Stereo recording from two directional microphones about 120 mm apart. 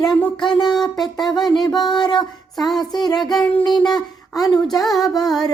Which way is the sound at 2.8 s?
35° left (ahead or behind).